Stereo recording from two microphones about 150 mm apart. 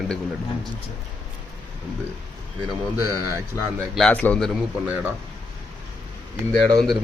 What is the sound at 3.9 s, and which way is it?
Speech, 5° left (ahead or behind).